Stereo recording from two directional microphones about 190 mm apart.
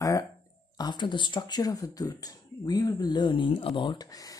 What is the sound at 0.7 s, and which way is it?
Speech, 20° left (ahead or behind).